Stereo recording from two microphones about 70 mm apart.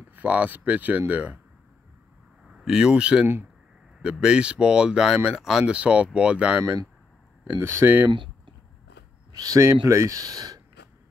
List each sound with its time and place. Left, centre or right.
0.1 s speech: right
2.5 s speech: centre
7.6 s speech: right
9.3 s speech: right